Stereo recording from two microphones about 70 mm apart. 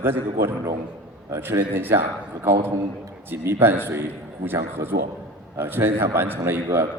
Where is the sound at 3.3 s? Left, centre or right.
Right.